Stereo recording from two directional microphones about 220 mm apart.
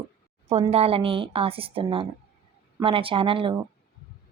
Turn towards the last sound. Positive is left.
turn(degrees=-25)  # may be behind; listen again after turning